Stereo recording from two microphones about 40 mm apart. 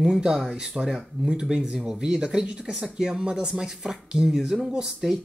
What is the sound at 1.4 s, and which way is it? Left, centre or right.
Speech, centre.